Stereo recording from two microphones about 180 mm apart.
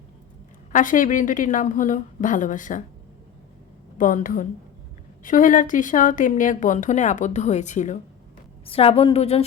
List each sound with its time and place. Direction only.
0.7 s speech: 45° left (ahead or behind)
3.9 s a woman's voice: 45° left (ahead or behind)